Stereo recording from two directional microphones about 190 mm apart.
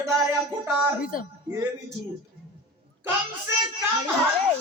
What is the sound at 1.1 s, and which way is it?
Speech, 45° left (ahead or behind).